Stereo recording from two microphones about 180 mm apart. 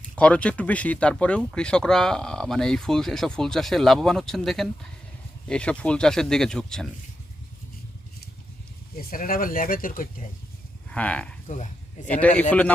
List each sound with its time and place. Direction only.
0.2 s speech: 5° left (ahead or behind)
9.0 s speech: 50° left (ahead or behind)
10.9 s speech: 5° left (ahead or behind)
11.4 s speech: 45° left (ahead or behind)
12.4 s speech: 10° left (ahead or behind)